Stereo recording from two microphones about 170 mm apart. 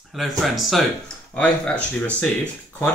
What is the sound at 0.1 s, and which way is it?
Speech, centre (ahead or behind).